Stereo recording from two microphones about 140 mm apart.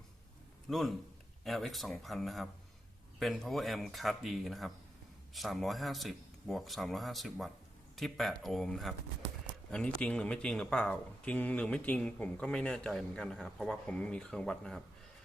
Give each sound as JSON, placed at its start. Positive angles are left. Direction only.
{"t": 0.7, "sound": "speech", "side_deg": 0}